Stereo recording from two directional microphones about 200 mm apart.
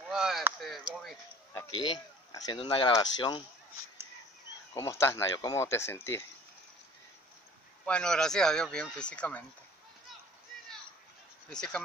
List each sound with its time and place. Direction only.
0.1 s speech: 5° right (ahead or behind)
1.7 s speech: 25° left (ahead or behind)
4.7 s speech: 15° left (ahead or behind)
7.8 s speech: 5° left (ahead or behind)
11.5 s speech: 5° left (ahead or behind)